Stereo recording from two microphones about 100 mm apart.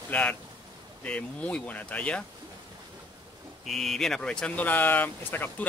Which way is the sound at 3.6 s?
Centre (ahead or behind).